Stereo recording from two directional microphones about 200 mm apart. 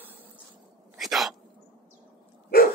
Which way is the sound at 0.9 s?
Centre (ahead or behind).